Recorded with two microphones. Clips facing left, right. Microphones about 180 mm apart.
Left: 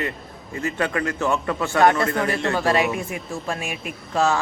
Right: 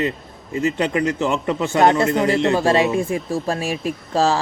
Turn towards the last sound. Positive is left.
turn(degrees=-35)  # may be behind; listen again after turning